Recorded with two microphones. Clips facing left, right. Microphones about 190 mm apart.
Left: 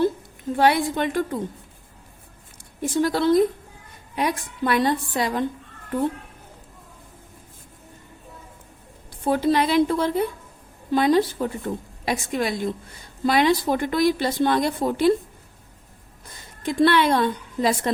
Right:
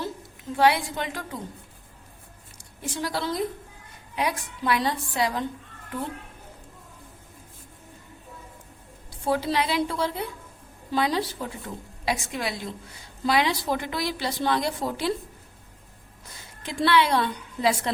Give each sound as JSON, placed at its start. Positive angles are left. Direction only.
{"t": 0.5, "sound": "a woman's voice", "side_deg": 50}
{"t": 2.8, "sound": "a woman's voice", "side_deg": 50}
{"t": 9.2, "sound": "a woman's voice", "side_deg": 50}
{"t": 16.6, "sound": "a woman's voice", "side_deg": 50}